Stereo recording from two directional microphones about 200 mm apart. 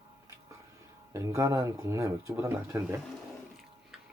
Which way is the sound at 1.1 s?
15° right (ahead or behind).